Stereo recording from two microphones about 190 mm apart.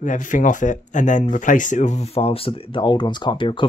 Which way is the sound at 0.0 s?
40° left (ahead or behind).